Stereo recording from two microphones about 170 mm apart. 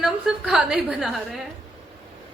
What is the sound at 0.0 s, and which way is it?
A woman's voice, centre (ahead or behind).